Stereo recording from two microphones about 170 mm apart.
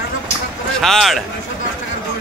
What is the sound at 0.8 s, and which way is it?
Speech, centre (ahead or behind).